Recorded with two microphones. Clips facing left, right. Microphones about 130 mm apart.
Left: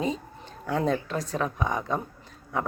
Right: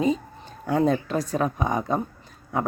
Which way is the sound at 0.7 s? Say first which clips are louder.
Right 4 dB; 5° right (ahead or behind).